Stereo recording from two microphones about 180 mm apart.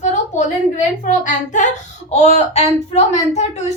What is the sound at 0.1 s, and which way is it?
A woman's voice, 40° left (ahead or behind).